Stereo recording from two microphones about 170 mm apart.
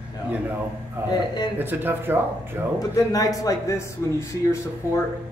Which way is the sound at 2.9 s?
20° left (ahead or behind).